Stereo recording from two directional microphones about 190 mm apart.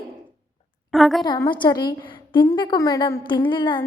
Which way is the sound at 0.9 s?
Centre (ahead or behind).